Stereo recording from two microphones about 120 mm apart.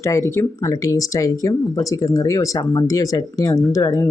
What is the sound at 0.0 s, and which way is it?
Speech, 25° left (ahead or behind).